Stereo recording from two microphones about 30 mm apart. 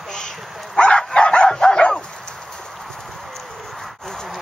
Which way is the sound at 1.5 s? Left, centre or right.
Left.